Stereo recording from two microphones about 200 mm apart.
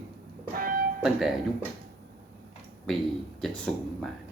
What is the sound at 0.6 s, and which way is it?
Music, 45° right (ahead or behind).